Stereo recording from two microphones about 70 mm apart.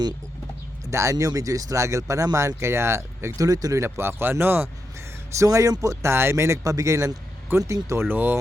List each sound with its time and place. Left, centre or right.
0.9 s speech: right
1.1 s speech: right
2.6 s speech: right
3.3 s speech: right
3.8 s speech: right
5.4 s speech: right
6.1 s speech: right
7.9 s speech: right